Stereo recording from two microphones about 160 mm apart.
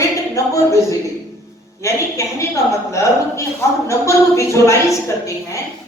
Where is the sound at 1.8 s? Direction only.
20° left (ahead or behind).